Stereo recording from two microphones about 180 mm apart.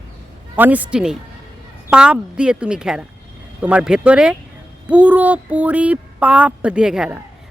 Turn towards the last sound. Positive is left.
turn(degrees=-5)  # may be behind; listen again after turning